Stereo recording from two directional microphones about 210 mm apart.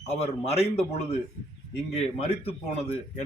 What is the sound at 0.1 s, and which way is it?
Speech, 30° left (ahead or behind).